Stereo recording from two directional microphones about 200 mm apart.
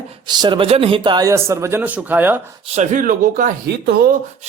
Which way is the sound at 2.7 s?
40° right (ahead or behind).